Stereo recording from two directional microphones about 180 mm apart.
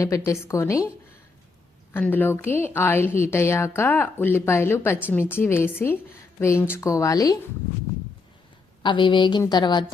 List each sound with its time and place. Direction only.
0.0 s a woman's voice: 15° left (ahead or behind)
1.9 s a woman's voice: 10° left (ahead or behind)
8.8 s a woman's voice: 25° left (ahead or behind)